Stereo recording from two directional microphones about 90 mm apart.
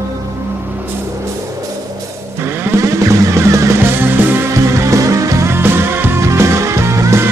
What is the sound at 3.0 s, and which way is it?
Music, 35° right (ahead or behind).